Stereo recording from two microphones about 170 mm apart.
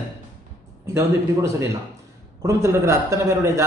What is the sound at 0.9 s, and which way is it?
A man's voice, 15° right (ahead or behind).